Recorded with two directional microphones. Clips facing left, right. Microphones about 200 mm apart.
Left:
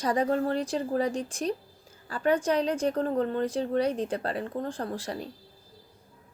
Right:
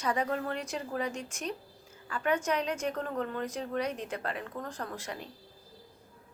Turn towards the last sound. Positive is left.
turn(degrees=35)  # may be behind; listen again after turning